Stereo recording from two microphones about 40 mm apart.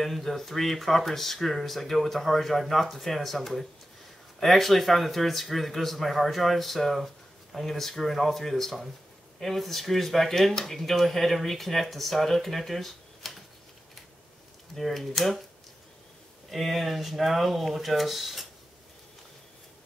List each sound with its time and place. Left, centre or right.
0.0 s speech: centre
14.8 s speech: centre
16.4 s speech: centre